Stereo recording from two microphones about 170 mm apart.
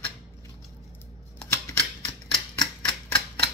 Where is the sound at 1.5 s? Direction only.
20° left (ahead or behind).